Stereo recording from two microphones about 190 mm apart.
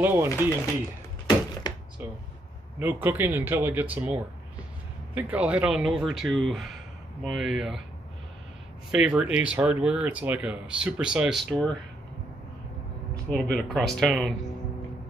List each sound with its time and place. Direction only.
0.0 s speech: 10° right (ahead or behind)
1.6 s a sound: 20° left (ahead or behind)
2.8 s speech: 10° right (ahead or behind)
8.9 s speech: 5° right (ahead or behind)
13.1 s speech: 5° left (ahead or behind)